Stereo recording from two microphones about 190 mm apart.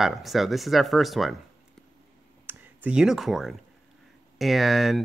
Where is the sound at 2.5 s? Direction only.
5° right (ahead or behind).